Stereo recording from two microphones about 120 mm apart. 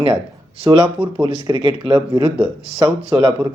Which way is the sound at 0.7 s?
35° right (ahead or behind).